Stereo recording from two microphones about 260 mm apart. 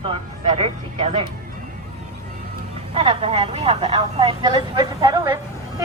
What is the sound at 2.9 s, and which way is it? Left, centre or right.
Speech, right.